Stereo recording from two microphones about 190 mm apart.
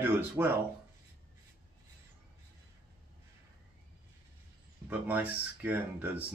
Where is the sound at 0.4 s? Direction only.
10° right (ahead or behind).